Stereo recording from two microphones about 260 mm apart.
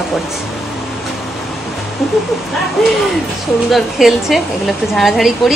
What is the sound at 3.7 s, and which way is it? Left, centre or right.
A woman's voice, centre.